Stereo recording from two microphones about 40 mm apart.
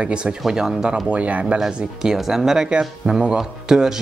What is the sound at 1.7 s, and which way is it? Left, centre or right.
Speech, centre.